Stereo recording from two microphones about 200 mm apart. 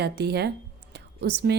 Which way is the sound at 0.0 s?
55° right (ahead or behind).